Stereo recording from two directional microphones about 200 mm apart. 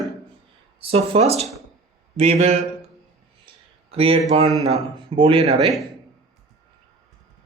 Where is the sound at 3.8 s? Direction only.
30° right (ahead or behind).